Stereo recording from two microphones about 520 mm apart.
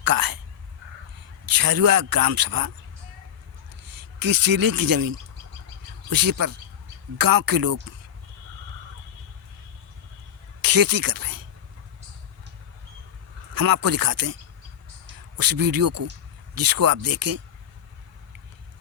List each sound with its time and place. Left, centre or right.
0.0 s speech: right
1.5 s a man's voice: right
3.8 s a man's voice: right
10.6 s speech: right
13.5 s a man's voice: right
15.4 s a man's voice: right